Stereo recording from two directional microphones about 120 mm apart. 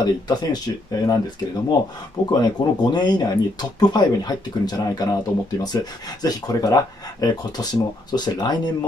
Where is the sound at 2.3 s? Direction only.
35° left (ahead or behind).